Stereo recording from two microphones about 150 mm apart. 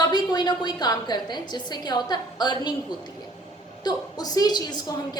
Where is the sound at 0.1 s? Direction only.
30° left (ahead or behind).